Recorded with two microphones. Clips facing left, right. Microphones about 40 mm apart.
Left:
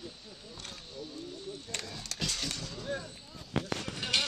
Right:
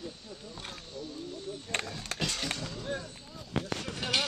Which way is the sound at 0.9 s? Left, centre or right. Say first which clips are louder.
Right 2 dB; centre.